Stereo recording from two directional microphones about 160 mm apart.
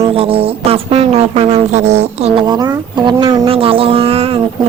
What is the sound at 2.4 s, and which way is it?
Speech, 25° right (ahead or behind).